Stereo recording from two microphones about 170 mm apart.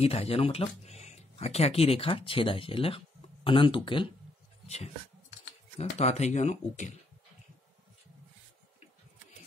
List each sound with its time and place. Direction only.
0.0 s speech: 35° left (ahead or behind)